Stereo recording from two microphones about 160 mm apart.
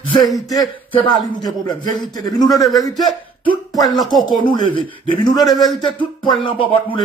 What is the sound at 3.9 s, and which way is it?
Speech, centre (ahead or behind).